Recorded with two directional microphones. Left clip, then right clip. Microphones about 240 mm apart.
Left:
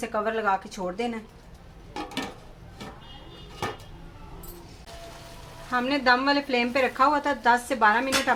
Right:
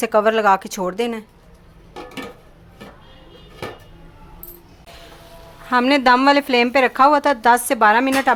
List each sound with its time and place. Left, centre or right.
0.0 s a woman's voice: right
5.7 s a woman's voice: right